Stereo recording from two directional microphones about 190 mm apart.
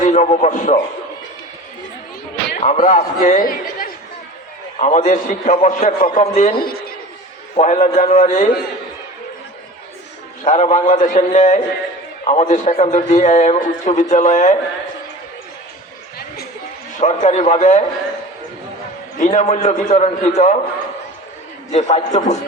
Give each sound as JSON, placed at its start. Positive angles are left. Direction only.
{"t": 0.0, "sound": "a man's voice", "side_deg": 40}
{"t": 2.6, "sound": "a man's voice", "side_deg": 40}
{"t": 6.0, "sound": "a man's voice", "side_deg": 50}
{"t": 6.2, "sound": "a man's voice", "side_deg": 35}
{"t": 6.6, "sound": "a woman's voice", "side_deg": 50}
{"t": 7.5, "sound": "a man's voice", "side_deg": 35}
{"t": 10.4, "sound": "a man's voice", "side_deg": 40}
{"t": 17.0, "sound": "a man's voice", "side_deg": 35}
{"t": 19.2, "sound": "a man's voice", "side_deg": 40}
{"t": 21.7, "sound": "a man's voice", "side_deg": 35}